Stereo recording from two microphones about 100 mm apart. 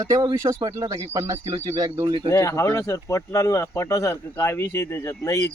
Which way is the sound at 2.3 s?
30° left (ahead or behind).